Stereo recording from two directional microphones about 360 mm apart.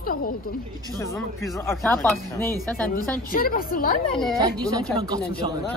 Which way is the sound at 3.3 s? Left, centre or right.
Left.